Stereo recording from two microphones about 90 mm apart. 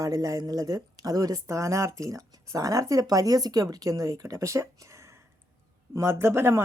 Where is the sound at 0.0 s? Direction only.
45° right (ahead or behind).